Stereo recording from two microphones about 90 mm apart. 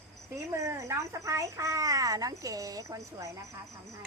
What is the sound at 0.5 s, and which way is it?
A child's voice, 35° right (ahead or behind).